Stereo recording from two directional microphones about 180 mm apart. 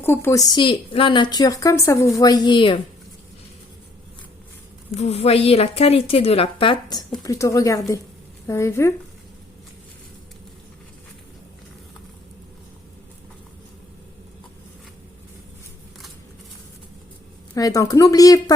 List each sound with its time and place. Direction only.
0.0 s a woman's voice: 15° left (ahead or behind)
4.9 s a woman's voice: 35° left (ahead or behind)
7.2 s speech: 20° left (ahead or behind)
17.5 s a woman's voice: 20° left (ahead or behind)